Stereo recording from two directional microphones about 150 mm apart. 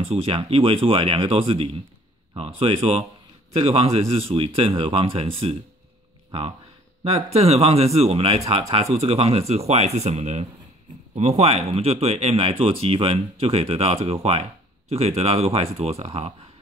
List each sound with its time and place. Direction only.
0.0 s speech: 40° right (ahead or behind)
7.0 s speech: 45° right (ahead or behind)